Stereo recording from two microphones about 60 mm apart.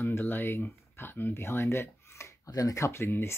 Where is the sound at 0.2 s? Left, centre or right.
Left.